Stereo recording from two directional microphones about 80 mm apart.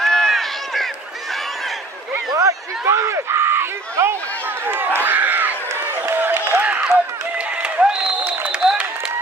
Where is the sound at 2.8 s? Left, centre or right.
Right.